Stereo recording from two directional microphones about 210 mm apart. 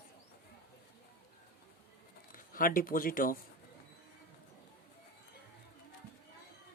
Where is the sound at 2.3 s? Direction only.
40° left (ahead or behind).